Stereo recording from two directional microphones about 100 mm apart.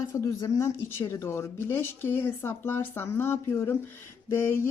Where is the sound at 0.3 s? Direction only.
30° left (ahead or behind).